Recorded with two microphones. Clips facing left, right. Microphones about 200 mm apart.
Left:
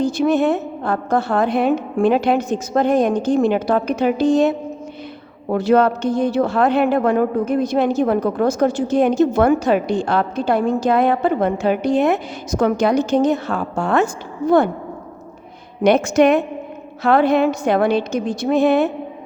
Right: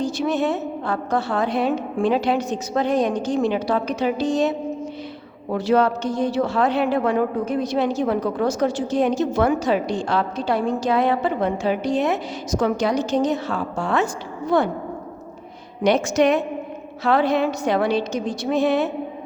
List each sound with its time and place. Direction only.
0.0 s a woman's voice: 55° left (ahead or behind)
15.8 s a woman's voice: 55° left (ahead or behind)